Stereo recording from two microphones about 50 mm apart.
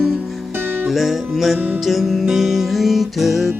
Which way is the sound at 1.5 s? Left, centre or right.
Right.